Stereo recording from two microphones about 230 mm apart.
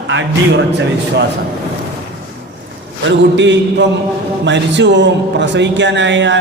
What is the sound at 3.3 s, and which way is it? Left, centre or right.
A man's voice, right.